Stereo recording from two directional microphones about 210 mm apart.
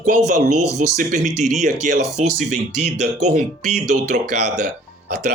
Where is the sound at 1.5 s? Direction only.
35° right (ahead or behind).